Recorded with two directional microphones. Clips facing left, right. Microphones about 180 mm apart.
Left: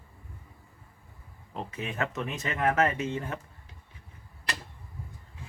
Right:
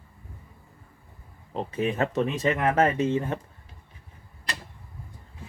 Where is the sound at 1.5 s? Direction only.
30° right (ahead or behind).